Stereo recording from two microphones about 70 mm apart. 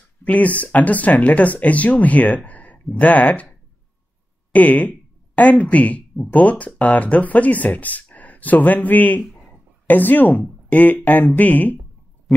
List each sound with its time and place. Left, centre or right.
0.2 s speech: left
9.5 s a sound: left
10.7 s speech: left